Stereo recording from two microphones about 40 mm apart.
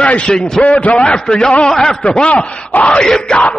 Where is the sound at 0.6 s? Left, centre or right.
Left.